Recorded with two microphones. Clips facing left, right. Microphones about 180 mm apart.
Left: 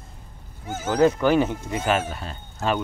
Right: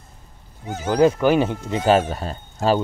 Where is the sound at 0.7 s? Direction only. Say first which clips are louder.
Right 2 dB; 15° right (ahead or behind).